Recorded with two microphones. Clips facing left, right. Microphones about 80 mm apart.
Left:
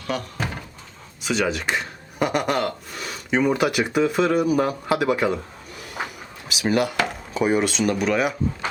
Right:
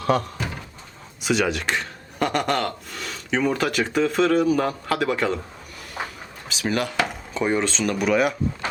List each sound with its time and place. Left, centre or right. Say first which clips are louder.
1.2 s speech: right 1 dB; centre
6.5 s speech: left 3 dB; centre